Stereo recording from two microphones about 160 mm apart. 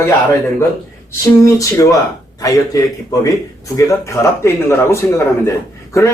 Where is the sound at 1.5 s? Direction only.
20° left (ahead or behind).